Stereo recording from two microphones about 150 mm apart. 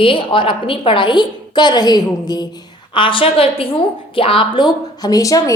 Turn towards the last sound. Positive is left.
turn(degrees=20)  # may be behind; listen again after turning